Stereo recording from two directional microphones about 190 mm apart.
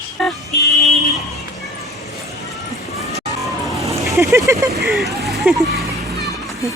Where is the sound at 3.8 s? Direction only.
15° right (ahead or behind).